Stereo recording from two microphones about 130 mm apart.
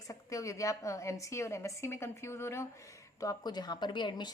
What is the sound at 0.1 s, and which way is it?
A woman's voice, 25° left (ahead or behind).